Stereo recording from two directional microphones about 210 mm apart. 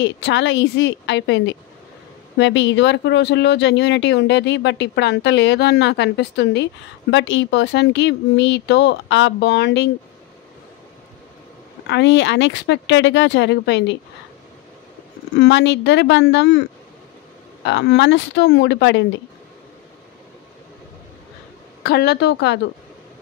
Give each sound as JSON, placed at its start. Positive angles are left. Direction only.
{"t": 0.0, "sound": "speech", "side_deg": 55}
{"t": 11.9, "sound": "speech", "side_deg": 55}
{"t": 15.3, "sound": "speech", "side_deg": 55}
{"t": 17.6, "sound": "speech", "side_deg": 55}
{"t": 21.8, "sound": "speech", "side_deg": 50}